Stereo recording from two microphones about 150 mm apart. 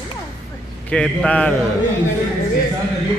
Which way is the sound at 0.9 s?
5° left (ahead or behind).